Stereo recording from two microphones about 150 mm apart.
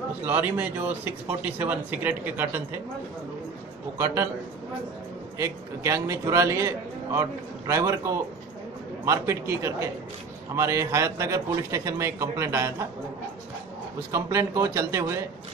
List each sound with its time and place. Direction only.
0.2 s speech: 10° right (ahead or behind)
4.0 s a man's voice: 20° right (ahead or behind)
5.4 s a man's voice: 20° right (ahead or behind)
14.1 s a man's voice: 20° right (ahead or behind)